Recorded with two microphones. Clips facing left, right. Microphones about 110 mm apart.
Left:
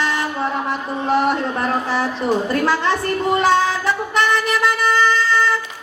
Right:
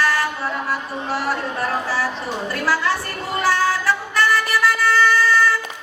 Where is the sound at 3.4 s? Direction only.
20° left (ahead or behind).